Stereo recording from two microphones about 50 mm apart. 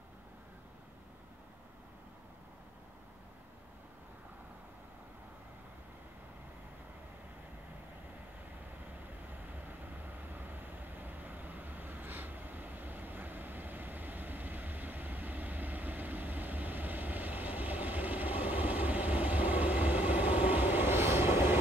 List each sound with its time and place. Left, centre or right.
9.5 s vehicle: right